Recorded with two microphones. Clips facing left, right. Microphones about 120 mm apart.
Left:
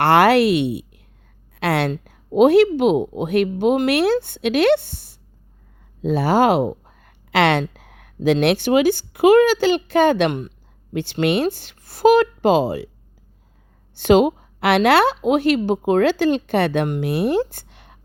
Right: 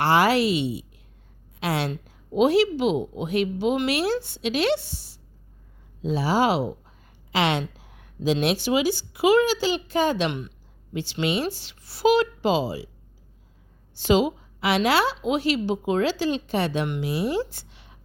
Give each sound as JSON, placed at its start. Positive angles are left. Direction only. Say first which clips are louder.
{"t": 0.0, "sound": "a woman's voice", "louder": "left 6 dB", "side_deg": 60}
{"t": 13.9, "sound": "speech", "louder": "left 6 dB", "side_deg": 60}